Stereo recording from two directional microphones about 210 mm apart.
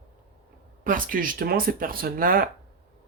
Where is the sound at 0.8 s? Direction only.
40° right (ahead or behind).